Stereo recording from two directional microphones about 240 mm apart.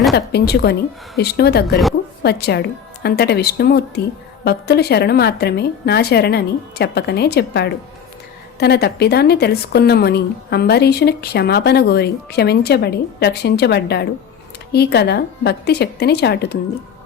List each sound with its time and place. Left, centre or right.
0.1 s a woman's voice: left